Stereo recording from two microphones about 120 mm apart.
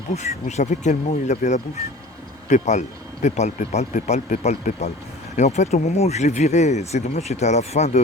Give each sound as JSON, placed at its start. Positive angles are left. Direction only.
{"t": 0.1, "sound": "speech", "side_deg": 75}